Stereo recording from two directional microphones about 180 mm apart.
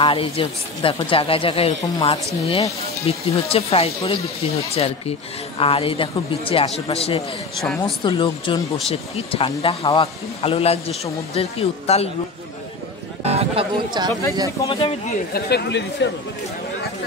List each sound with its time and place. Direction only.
0.0 s speech: 30° left (ahead or behind)
13.2 s speech: 35° right (ahead or behind)
14.7 s speech: 30° left (ahead or behind)
15.3 s speech: 70° left (ahead or behind)